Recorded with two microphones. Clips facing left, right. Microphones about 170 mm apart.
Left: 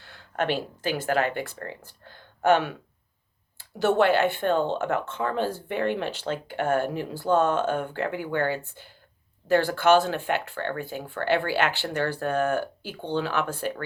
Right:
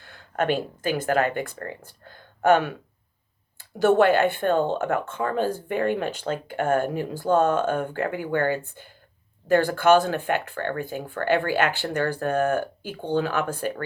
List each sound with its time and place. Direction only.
0.0 s speech: 50° right (ahead or behind)